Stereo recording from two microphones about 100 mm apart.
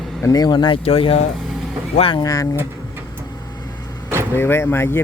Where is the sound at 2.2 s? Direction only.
35° left (ahead or behind).